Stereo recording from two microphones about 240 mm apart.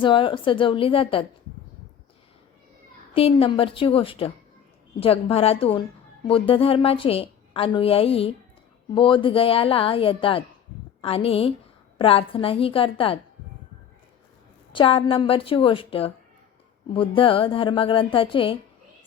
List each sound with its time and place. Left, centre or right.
0.0 s a woman's voice: left
3.2 s a woman's voice: left
14.7 s a woman's voice: left